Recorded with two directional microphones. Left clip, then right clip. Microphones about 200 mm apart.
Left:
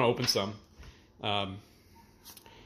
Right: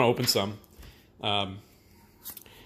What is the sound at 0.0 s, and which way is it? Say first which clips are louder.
Speech: right 3 dB; 20° right (ahead or behind).